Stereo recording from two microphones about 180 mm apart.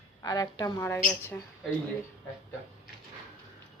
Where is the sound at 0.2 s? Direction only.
20° left (ahead or behind).